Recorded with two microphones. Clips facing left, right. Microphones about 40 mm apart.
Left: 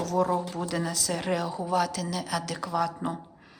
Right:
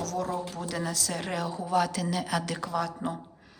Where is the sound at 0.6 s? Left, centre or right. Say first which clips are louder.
Left 2 dB; centre.